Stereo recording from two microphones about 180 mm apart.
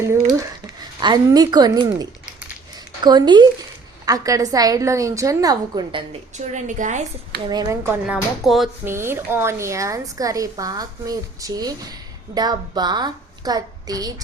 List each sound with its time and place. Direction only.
0.0 s speech: 15° right (ahead or behind)
2.7 s a sound: 25° right (ahead or behind)
4.0 s a woman's voice: 20° right (ahead or behind)
6.3 s a woman's voice: 45° right (ahead or behind)
7.4 s a woman's voice: 20° right (ahead or behind)
8.0 s speech: 5° right (ahead or behind)
8.8 s a woman's voice: 15° right (ahead or behind)